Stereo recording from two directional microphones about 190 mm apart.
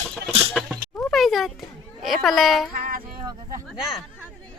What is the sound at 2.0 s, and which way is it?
Speech, centre (ahead or behind).